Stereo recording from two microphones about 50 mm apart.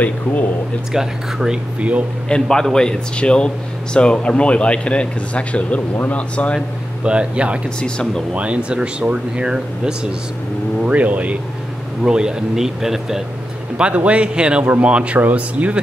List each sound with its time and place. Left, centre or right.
0.0 s speech: left
0.9 s speech: centre
1.8 s speech: right
2.4 s speech: centre; by 6.6 s left
7.1 s speech: right
10.8 s speech: right
12.0 s speech: centre
13.7 s speech: right
14.6 s speech: right